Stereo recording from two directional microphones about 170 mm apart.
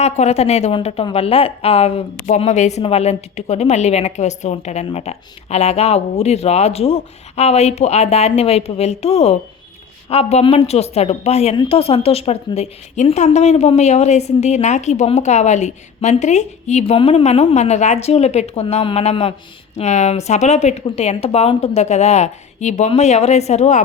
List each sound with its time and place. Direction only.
0.0 s a woman's voice: 40° left (ahead or behind)